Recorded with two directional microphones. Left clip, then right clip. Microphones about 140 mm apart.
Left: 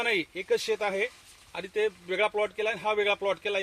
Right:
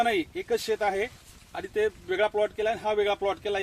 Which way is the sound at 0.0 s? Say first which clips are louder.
Right 2 dB; 30° right (ahead or behind).